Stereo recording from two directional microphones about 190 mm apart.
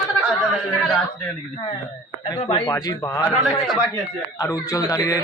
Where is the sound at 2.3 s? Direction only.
25° left (ahead or behind).